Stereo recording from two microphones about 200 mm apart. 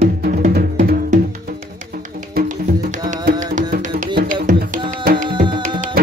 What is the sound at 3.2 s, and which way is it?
Music, 40° right (ahead or behind).